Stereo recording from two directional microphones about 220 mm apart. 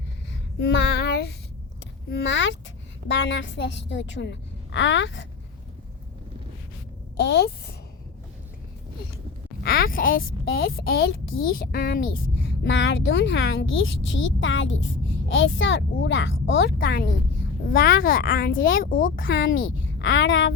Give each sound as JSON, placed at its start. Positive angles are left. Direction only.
{"t": 0.6, "sound": "child singing", "side_deg": 55}
{"t": 1.8, "sound": "a woman's voice", "side_deg": 50}
{"t": 7.2, "sound": "a woman's voice", "side_deg": 50}
{"t": 9.6, "sound": "a woman's voice", "side_deg": 40}
{"t": 12.6, "sound": "speech", "side_deg": 60}
{"t": 16.6, "sound": "a woman's voice", "side_deg": 45}
{"t": 17.7, "sound": "speech", "side_deg": 60}
{"t": 18.0, "sound": "speech", "side_deg": 40}
{"t": 19.6, "sound": "a child's voice", "side_deg": 60}